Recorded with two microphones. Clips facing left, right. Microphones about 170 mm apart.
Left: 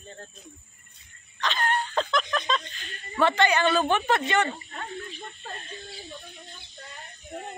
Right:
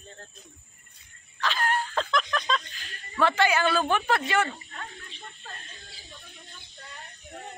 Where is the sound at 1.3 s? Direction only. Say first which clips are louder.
Even; 5° right (ahead or behind).